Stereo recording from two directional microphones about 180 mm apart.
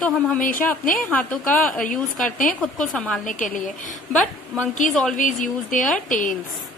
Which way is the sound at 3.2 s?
45° left (ahead or behind).